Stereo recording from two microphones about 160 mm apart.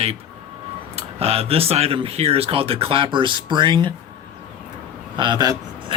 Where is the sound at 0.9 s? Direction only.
40° right (ahead or behind).